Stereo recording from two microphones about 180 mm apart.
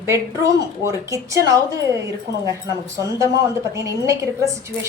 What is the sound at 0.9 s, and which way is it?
Speech, 15° right (ahead or behind).